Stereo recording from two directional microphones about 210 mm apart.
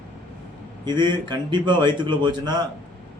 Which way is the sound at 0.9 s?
20° right (ahead or behind).